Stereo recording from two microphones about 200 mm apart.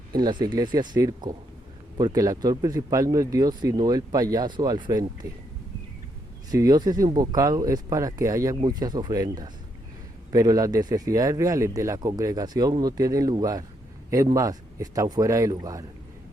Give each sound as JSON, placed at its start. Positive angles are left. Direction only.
{"t": 0.2, "sound": "speech", "side_deg": -20}
{"t": 6.5, "sound": "speech", "side_deg": -20}